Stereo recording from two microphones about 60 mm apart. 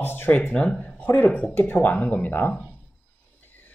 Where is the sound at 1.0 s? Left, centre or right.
Left.